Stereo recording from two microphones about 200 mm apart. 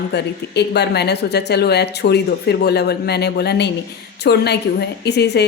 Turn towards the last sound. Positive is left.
turn(degrees=55)  # may be behind; listen again after turning